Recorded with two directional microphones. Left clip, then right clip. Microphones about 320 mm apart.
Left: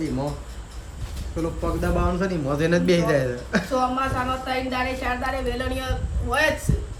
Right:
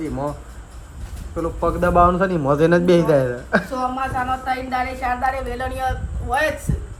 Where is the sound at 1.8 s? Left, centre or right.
Centre.